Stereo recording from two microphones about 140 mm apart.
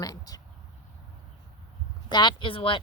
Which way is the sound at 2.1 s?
35° left (ahead or behind).